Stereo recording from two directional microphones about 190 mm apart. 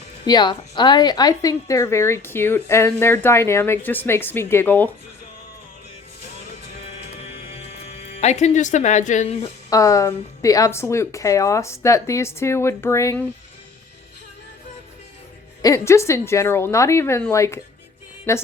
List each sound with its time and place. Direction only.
0.3 s a woman's voice: 25° left (ahead or behind)
8.2 s speech: 35° left (ahead or behind)
9.6 s a woman's voice: 20° left (ahead or behind)
15.6 s a woman's voice: 15° left (ahead or behind)